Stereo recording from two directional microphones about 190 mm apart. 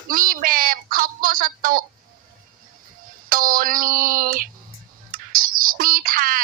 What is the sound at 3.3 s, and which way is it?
Speech, 50° right (ahead or behind).